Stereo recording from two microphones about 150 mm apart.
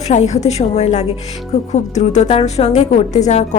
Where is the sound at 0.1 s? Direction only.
50° left (ahead or behind).